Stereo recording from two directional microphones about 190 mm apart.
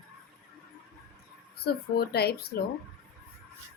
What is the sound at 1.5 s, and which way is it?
Speech, 55° left (ahead or behind).